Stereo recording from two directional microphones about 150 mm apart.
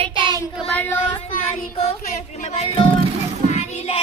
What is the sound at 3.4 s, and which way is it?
Child singing, 50° left (ahead or behind).